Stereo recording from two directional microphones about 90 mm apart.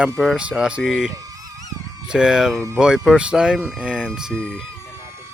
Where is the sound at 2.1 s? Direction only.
10° right (ahead or behind).